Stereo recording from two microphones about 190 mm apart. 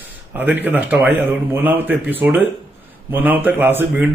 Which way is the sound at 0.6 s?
10° right (ahead or behind).